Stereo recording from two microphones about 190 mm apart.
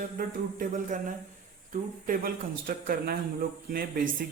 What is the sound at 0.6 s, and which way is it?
Speech, 45° right (ahead or behind).